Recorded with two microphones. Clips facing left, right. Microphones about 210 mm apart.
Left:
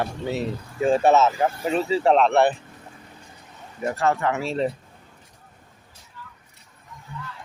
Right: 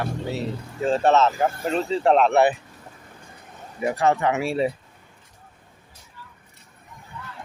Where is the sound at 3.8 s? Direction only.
15° right (ahead or behind).